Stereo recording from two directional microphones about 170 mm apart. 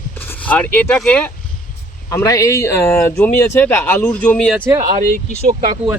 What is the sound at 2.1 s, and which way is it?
Speech, 20° left (ahead or behind).